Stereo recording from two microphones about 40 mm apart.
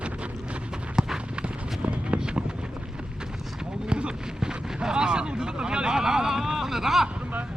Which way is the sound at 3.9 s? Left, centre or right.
Right.